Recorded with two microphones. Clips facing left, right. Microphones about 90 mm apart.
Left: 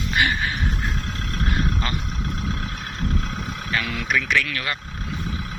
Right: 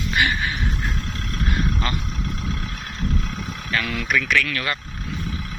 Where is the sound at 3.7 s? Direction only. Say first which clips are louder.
Right 1 dB; 15° left (ahead or behind).